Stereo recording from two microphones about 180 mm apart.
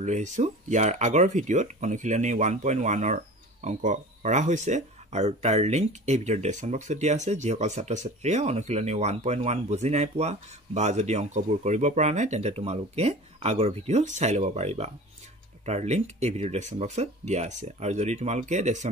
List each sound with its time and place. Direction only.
0.0 s speech: 40° right (ahead or behind)